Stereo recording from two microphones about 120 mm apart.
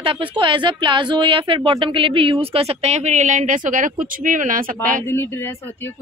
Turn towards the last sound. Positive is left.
turn(degrees=20)  # may be behind; listen again after turning